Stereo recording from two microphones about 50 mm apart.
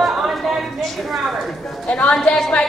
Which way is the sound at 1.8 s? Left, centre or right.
Left.